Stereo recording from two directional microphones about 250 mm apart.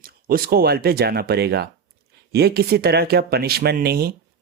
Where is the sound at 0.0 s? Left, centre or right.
Right.